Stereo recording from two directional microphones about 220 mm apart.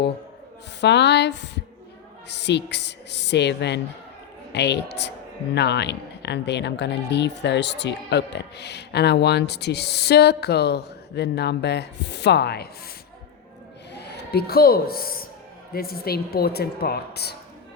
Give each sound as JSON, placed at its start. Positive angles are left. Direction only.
{"t": 0.8, "sound": "speech", "side_deg": 50}
{"t": 13.9, "sound": "speech", "side_deg": 50}